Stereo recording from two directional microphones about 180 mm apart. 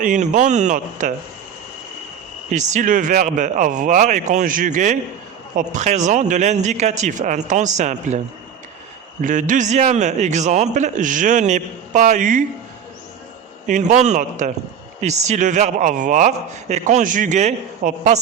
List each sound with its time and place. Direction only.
0.0 s a man's voice: 45° right (ahead or behind)
2.5 s a man's voice: 45° right (ahead or behind)
9.2 s a man's voice: 45° right (ahead or behind)
13.7 s a man's voice: 45° right (ahead or behind)